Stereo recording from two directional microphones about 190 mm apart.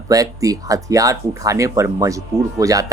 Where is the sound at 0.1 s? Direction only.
20° right (ahead or behind).